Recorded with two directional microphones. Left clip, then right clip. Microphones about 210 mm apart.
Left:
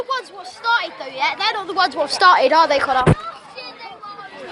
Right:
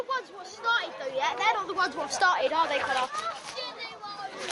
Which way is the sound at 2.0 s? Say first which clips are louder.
Left 12 dB; 30° left (ahead or behind).